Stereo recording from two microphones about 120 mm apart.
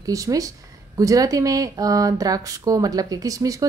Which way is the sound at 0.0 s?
30° right (ahead or behind).